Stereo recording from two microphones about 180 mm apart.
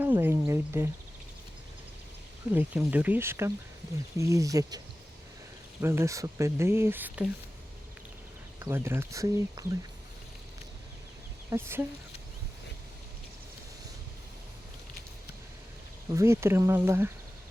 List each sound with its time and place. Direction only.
0.0 s a sound: 10° right (ahead or behind)
2.5 s speech: 10° right (ahead or behind)
5.8 s speech: 15° right (ahead or behind)
8.5 s speech: 15° right (ahead or behind)
11.5 s speech: 15° right (ahead or behind)
16.0 s speech: 15° right (ahead or behind)